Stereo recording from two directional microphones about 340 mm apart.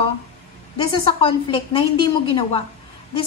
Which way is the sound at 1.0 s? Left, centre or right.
Centre.